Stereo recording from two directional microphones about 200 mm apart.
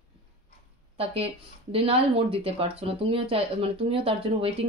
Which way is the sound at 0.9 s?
30° right (ahead or behind).